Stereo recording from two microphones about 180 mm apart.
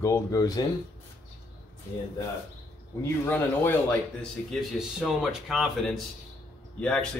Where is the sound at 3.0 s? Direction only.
10° left (ahead or behind).